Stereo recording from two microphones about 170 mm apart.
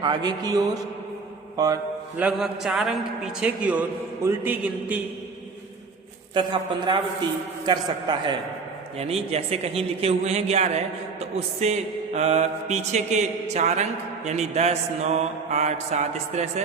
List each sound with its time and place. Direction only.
0.0 s a man's voice: 25° right (ahead or behind)
2.1 s a man's voice: 5° right (ahead or behind)
6.3 s a man's voice: 30° right (ahead or behind)
9.0 s mantra: 35° right (ahead or behind)